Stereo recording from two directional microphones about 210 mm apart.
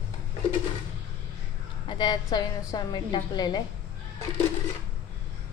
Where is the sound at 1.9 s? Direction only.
20° left (ahead or behind).